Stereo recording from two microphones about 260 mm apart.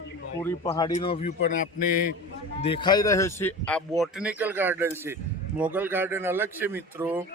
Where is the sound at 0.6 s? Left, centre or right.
Left.